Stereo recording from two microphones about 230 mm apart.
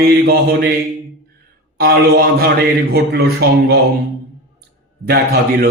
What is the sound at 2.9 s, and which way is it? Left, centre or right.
Speech, right.